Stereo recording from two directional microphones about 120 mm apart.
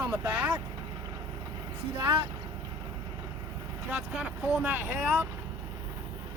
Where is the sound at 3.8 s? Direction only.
5° right (ahead or behind).